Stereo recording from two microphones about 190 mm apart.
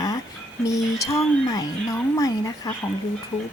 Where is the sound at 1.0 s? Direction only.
20° left (ahead or behind).